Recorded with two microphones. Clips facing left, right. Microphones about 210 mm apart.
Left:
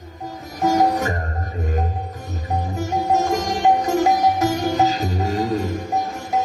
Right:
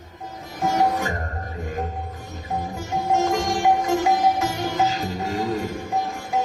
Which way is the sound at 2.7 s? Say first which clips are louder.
Left 3 dB; 40° left (ahead or behind).